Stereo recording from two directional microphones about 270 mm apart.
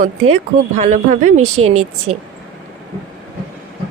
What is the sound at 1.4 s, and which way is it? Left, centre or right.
Speech, right.